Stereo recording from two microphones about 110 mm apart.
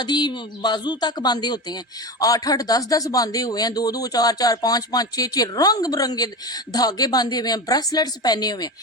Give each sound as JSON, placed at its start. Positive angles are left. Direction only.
{"t": 0.0, "sound": "speech", "side_deg": 40}